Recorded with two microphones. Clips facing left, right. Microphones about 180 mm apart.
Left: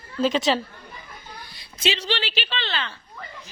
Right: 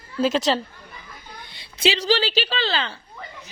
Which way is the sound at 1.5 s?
30° right (ahead or behind).